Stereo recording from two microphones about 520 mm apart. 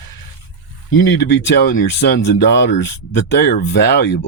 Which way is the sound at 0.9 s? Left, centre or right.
Centre.